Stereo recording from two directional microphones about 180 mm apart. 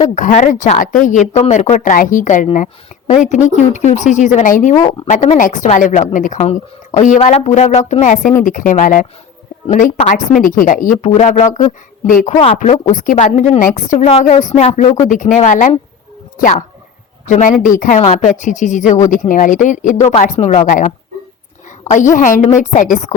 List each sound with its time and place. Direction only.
0.1 s speech: 40° left (ahead or behind)
12.3 s speech: 35° left (ahead or behind)